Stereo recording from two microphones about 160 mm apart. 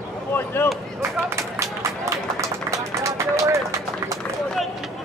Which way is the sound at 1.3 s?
15° right (ahead or behind).